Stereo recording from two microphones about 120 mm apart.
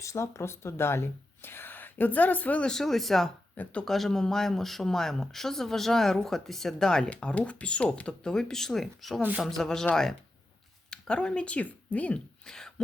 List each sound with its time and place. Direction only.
0.0 s speech: 25° left (ahead or behind); by 12.7 s 5° left (ahead or behind)